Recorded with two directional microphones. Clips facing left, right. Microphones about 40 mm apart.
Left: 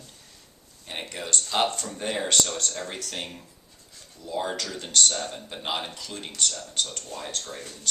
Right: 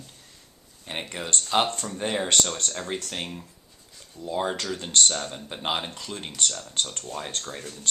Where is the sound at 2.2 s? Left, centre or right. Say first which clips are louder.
Right 1 dB; right.